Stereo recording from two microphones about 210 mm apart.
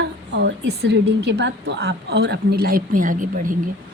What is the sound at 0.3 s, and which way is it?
A woman's voice, 55° right (ahead or behind).